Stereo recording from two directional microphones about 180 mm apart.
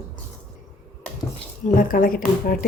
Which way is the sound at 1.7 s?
50° left (ahead or behind).